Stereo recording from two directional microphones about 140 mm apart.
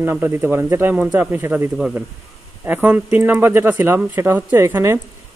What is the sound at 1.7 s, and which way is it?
Speech, 5° right (ahead or behind).